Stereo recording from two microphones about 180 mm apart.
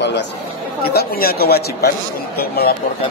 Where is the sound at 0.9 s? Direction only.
60° left (ahead or behind).